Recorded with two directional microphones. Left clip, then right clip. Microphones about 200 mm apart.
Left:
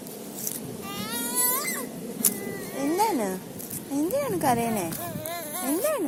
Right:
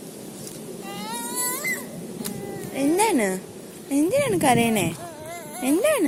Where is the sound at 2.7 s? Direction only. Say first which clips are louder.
Right 4 dB; 40° right (ahead or behind).